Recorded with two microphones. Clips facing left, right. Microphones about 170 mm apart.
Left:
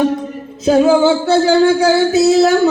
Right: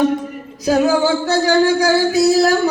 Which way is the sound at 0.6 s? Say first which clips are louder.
Left 4 dB; 25° left (ahead or behind).